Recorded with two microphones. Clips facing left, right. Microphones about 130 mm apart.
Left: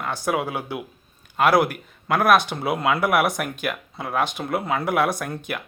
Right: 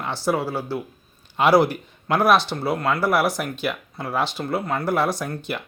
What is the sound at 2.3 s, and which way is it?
Speech, 15° left (ahead or behind).